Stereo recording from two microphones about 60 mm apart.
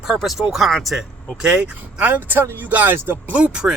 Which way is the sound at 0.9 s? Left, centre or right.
Centre.